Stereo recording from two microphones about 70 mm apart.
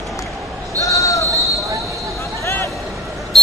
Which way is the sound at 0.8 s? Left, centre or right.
Left.